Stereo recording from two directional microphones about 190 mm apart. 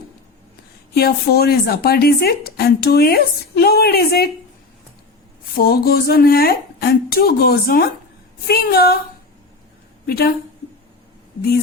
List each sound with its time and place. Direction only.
0.9 s speech: 55° left (ahead or behind)
5.5 s a woman's voice: 50° left (ahead or behind)
10.1 s a woman's voice: 55° left (ahead or behind)